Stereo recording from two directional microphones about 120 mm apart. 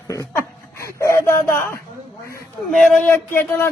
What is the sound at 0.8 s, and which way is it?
Speech, 25° left (ahead or behind).